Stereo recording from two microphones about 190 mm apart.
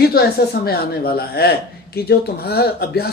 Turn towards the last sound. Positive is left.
turn(degrees=55)  # may be behind; listen again after turning